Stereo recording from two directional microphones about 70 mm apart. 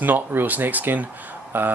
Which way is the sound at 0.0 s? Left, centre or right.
Right.